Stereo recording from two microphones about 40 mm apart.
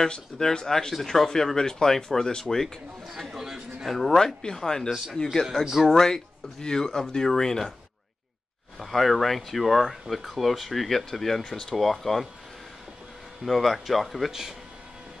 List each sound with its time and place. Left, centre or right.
0.0 s speech: centre
3.1 s speech: centre
4.4 s speech: centre
5.6 s speech: centre
5.9 s speech: centre
8.7 s speech: centre
13.5 s speech: centre